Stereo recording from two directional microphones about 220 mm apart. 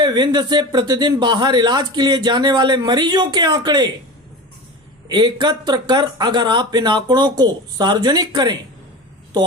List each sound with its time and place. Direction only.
0.0 s speech: 20° right (ahead or behind)
5.0 s speech: 20° right (ahead or behind)